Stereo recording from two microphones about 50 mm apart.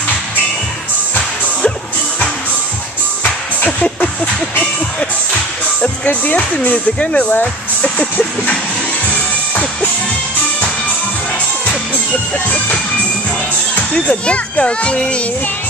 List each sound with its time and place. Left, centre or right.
6.0 s speech: left
13.7 s speech: left